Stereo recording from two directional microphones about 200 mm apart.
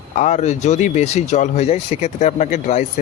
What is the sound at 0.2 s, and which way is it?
Speech, 35° left (ahead or behind).